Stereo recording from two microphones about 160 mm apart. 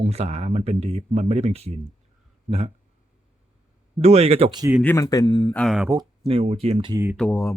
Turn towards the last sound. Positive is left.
turn(degrees=10)  # may be behind; listen again after turning